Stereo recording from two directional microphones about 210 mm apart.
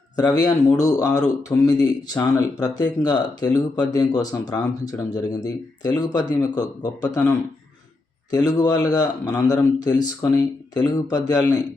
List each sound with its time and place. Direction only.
0.2 s a man's voice: 20° left (ahead or behind)